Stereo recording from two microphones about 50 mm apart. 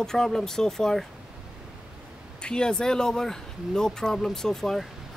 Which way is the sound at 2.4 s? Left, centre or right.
Centre.